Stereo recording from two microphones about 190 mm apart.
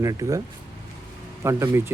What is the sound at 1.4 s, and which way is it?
Speech, 15° right (ahead or behind).